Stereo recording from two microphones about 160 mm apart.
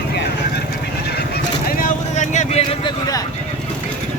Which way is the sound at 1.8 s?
50° left (ahead or behind).